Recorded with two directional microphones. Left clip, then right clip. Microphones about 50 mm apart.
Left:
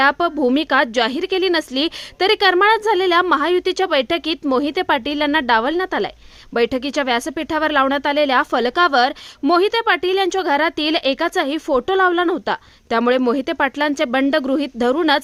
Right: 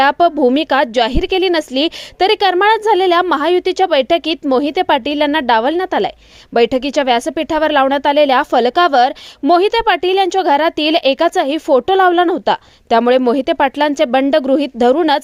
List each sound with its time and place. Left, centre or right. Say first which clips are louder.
0.0 s a woman's voice: right 5 dB; right
3.6 s a woman's voice: right 5 dB; right